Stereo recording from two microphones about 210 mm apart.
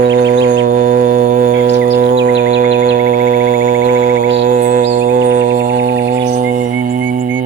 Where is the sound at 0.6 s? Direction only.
40° right (ahead or behind).